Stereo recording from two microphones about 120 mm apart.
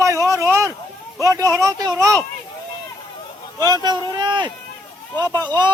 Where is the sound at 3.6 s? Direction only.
35° right (ahead or behind).